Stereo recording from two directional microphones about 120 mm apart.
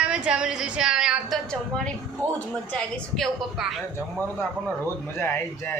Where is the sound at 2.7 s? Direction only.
Centre (ahead or behind).